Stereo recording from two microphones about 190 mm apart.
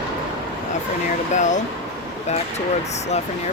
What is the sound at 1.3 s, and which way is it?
Speech, 40° left (ahead or behind).